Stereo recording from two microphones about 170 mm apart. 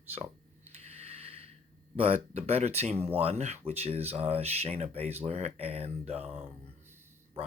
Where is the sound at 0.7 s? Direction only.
35° right (ahead or behind).